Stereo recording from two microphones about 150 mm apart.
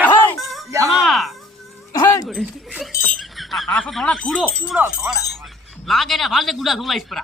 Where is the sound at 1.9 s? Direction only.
25° left (ahead or behind).